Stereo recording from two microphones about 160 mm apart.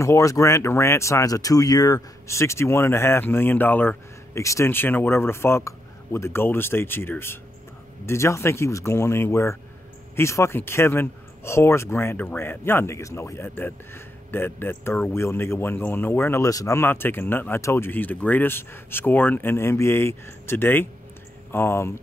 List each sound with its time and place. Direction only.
0.0 s speech: 20° left (ahead or behind)